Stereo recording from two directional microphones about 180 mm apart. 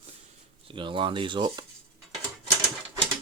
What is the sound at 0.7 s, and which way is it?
Speech, 25° right (ahead or behind).